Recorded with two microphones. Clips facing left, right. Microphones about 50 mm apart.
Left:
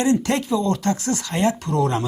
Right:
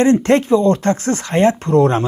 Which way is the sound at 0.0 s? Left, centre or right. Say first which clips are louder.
Right 7 dB; right.